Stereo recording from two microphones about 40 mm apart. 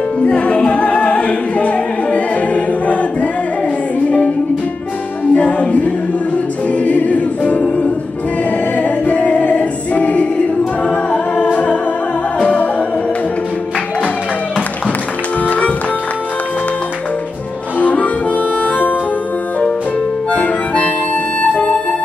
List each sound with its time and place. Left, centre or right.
0.2 s music: left
5.3 s music: left
10.8 s a capella: left
11.5 s music: left
15.4 s music: left
17.7 s harmonica: left
20.2 s music: left